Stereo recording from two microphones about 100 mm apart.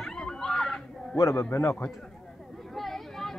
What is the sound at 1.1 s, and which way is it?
Speech, 30° left (ahead or behind).